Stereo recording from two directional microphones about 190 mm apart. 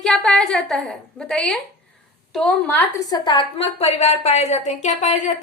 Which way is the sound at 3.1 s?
25° left (ahead or behind).